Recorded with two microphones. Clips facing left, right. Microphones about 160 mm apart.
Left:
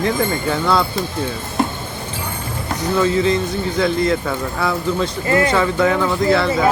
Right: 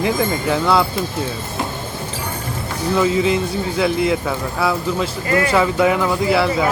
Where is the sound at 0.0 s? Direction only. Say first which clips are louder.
Even; 5° right (ahead or behind).